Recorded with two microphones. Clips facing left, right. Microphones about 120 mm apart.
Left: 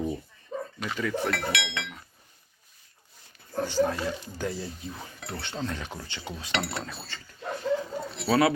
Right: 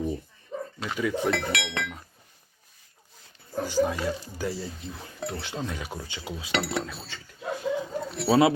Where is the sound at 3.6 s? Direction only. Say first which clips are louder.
Right 1 dB; 10° right (ahead or behind).